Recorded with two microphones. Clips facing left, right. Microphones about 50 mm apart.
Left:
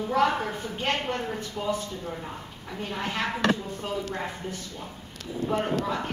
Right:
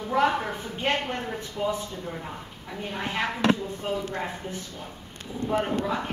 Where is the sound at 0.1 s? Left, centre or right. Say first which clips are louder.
Right 1 dB; centre.